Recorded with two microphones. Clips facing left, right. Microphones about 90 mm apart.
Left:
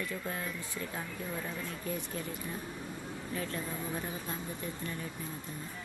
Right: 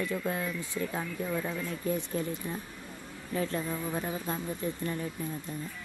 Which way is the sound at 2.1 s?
30° right (ahead or behind).